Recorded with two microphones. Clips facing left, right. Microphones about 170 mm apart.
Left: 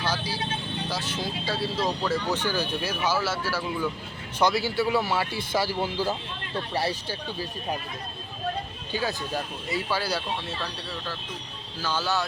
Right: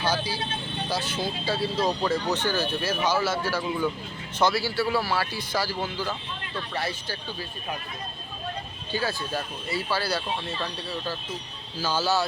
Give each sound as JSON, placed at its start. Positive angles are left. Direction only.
{"t": 0.0, "sound": "speech", "side_deg": 0}
{"t": 2.3, "sound": "speech", "side_deg": 10}
{"t": 4.4, "sound": "speech", "side_deg": 15}
{"t": 8.9, "sound": "speech", "side_deg": 15}
{"t": 11.8, "sound": "speech", "side_deg": -5}